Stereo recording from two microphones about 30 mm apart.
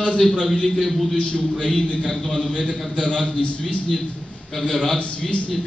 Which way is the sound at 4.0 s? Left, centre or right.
Centre.